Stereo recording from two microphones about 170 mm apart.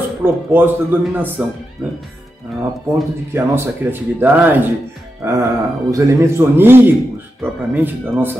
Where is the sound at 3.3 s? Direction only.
15° right (ahead or behind).